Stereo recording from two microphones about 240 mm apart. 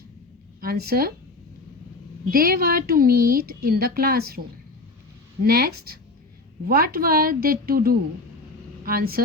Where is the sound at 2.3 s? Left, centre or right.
Right.